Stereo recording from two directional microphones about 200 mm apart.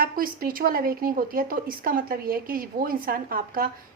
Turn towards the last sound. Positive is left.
turn(degrees=-45)  # may be behind; listen again after turning